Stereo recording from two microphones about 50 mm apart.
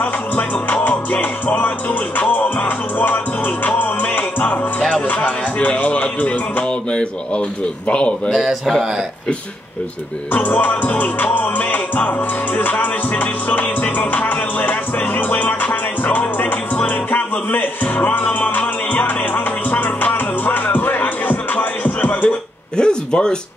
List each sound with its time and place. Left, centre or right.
0.0 s music: left
6.9 s speech: centre
8.4 s speech: centre
10.3 s music: left
22.8 s a sound: centre